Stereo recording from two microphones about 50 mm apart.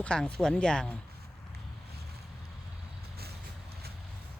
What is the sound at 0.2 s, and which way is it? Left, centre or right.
Speech, centre.